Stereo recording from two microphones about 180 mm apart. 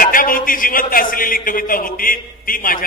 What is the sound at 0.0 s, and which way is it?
A man's voice, 50° left (ahead or behind).